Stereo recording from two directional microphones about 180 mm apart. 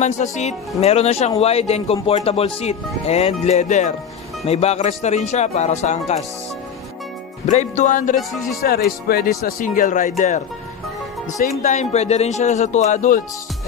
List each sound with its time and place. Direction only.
0.0 s speech: 40° left (ahead or behind)
7.4 s speech: 40° left (ahead or behind)
8.6 s speech: 55° left (ahead or behind)
11.6 s speech: 40° left (ahead or behind)